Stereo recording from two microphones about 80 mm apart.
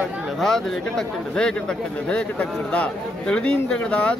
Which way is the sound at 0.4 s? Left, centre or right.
Centre.